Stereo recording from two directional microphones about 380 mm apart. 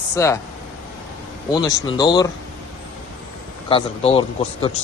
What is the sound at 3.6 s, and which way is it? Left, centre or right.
Speech, centre.